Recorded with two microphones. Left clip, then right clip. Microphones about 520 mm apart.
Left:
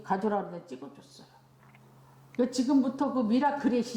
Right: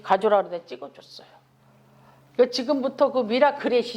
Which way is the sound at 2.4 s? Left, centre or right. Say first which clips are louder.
Right 6 dB; right.